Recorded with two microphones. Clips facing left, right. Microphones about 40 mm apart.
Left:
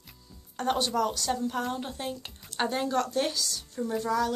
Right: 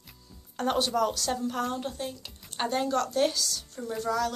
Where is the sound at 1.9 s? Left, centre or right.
Left.